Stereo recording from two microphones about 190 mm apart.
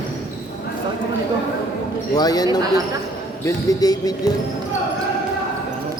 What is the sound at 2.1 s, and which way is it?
Speech, 20° left (ahead or behind).